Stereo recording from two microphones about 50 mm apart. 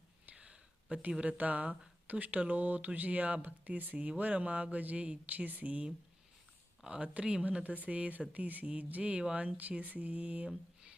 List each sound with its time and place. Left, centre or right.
0.3 s a sound: right
1.2 s speech: right
6.8 s speech: right
9.6 s speech: right